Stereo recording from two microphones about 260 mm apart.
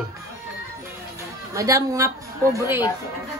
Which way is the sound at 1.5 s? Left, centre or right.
Centre.